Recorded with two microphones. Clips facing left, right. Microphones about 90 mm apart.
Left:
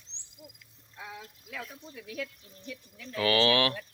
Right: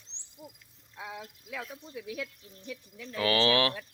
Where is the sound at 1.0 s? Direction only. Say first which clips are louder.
Right 2 dB; 15° right (ahead or behind).